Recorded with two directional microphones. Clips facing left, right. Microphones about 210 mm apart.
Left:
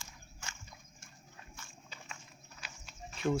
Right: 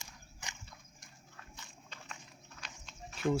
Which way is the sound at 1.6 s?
20° right (ahead or behind).